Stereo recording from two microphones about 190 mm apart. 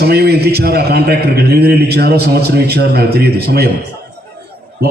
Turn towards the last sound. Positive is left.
turn(degrees=-60)  # may be behind; listen again after turning